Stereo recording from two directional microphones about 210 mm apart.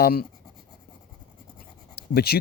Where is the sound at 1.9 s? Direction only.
50° left (ahead or behind).